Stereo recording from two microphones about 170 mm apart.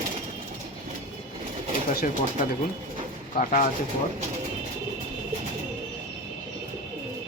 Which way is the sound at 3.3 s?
50° left (ahead or behind).